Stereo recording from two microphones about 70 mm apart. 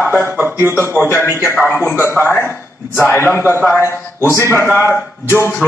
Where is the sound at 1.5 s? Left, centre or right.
Left.